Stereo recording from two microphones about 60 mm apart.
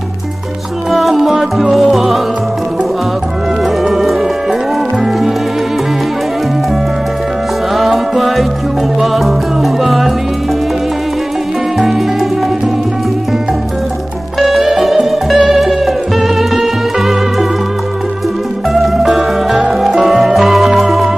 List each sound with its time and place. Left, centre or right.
0.9 s music: centre
3.8 s music: centre
7.7 s music: centre
14.4 s music: centre
18.7 s music: centre